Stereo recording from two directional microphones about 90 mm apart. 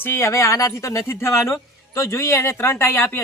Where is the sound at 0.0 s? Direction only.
30° left (ahead or behind).